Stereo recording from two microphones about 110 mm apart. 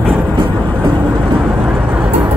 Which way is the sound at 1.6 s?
15° right (ahead or behind).